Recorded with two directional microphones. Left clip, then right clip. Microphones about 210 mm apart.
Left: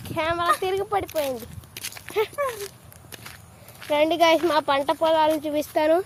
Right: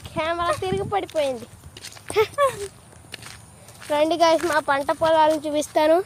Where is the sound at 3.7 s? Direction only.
Centre (ahead or behind).